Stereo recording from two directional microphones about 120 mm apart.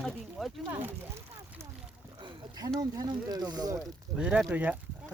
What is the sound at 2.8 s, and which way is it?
Speech, 30° right (ahead or behind).